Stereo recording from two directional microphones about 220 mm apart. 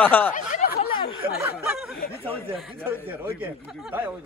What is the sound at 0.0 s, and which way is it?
Speech, 10° left (ahead or behind).